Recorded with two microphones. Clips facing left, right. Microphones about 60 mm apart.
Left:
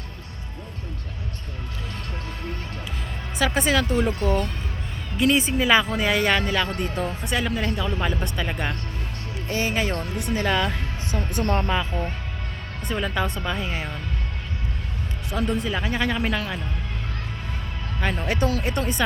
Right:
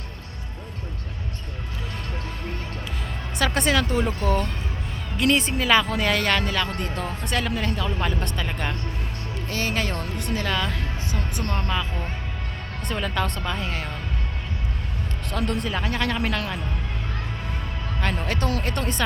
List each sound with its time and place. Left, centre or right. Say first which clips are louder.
3.3 s speech: left 1 dB; centre
5.1 s speech: left 1 dB; centre
11.1 s a woman's voice: left 6 dB; left
12.9 s speech: left 1 dB; centre
15.3 s speech: left 1 dB; centre
18.0 s speech: left 2 dB; centre